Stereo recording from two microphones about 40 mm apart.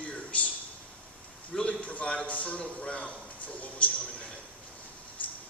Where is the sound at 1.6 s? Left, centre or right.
Left.